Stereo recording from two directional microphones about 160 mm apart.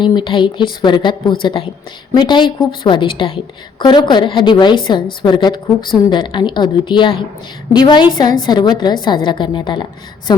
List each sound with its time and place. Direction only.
0.0 s a woman's voice: 30° left (ahead or behind)